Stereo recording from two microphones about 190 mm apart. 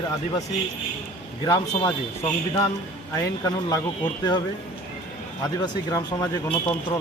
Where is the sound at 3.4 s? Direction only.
20° left (ahead or behind).